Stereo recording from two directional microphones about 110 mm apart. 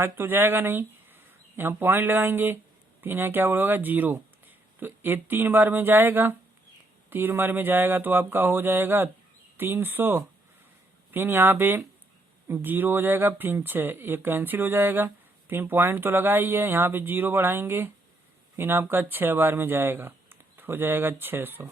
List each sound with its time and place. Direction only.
0.0 s speech: 20° right (ahead or behind)